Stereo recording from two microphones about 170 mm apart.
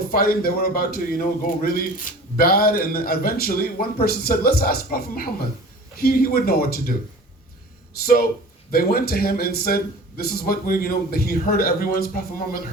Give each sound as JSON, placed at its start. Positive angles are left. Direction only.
{"t": 0.1, "sound": "speech", "side_deg": 60}
{"t": 8.0, "sound": "speech", "side_deg": 60}